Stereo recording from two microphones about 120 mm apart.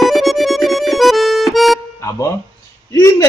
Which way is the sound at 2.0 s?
25° left (ahead or behind).